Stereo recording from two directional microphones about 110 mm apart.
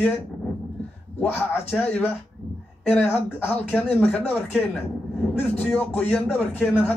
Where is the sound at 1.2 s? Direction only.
20° left (ahead or behind).